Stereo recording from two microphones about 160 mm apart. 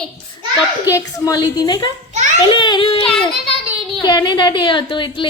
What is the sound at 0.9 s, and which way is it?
A woman's voice, 20° left (ahead or behind).